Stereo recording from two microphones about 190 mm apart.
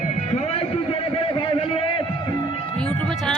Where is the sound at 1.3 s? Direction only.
25° left (ahead or behind).